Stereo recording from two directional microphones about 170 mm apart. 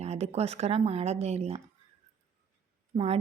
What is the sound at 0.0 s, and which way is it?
Speech, 40° right (ahead or behind).